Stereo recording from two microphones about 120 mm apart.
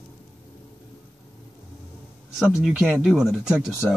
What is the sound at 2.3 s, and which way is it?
Speech, 5° right (ahead or behind).